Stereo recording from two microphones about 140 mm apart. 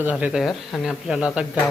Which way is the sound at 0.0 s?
10° right (ahead or behind).